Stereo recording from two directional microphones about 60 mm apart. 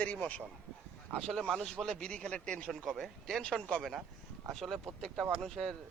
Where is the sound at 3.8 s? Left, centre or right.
Centre.